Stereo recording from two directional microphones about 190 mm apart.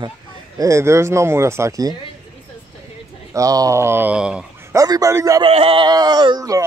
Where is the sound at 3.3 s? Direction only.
20° right (ahead or behind).